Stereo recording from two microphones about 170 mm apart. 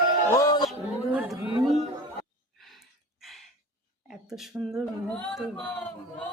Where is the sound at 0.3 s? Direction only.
20° left (ahead or behind).